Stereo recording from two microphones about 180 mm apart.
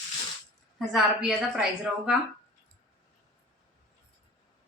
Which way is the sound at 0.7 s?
Centre (ahead or behind).